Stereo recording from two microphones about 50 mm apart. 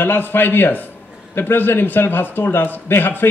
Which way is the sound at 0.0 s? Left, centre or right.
Left.